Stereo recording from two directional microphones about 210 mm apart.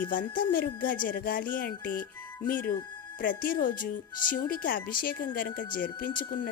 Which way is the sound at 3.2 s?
40° left (ahead or behind).